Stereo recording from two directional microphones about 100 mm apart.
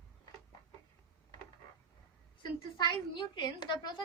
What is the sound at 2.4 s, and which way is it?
A woman's voice, 50° left (ahead or behind).